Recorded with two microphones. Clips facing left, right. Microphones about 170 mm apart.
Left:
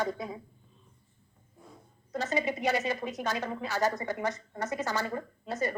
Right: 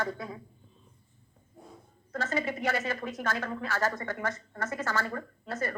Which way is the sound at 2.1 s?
15° left (ahead or behind).